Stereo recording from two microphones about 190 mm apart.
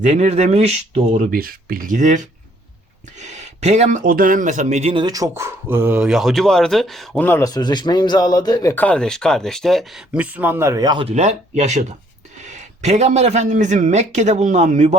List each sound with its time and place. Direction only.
0.0 s speech: 35° right (ahead or behind); by 7.3 s centre (ahead or behind)
7.3 s speech: 15° left (ahead or behind); by 11.1 s 25° right (ahead or behind)
11.1 s speech: 35° right (ahead or behind)